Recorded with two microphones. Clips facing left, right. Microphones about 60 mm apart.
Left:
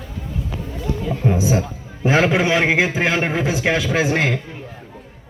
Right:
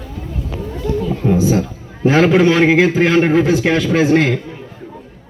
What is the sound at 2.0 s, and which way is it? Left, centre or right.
A man's voice, centre.